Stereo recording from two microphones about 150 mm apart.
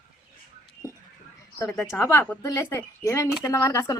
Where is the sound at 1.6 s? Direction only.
15° left (ahead or behind).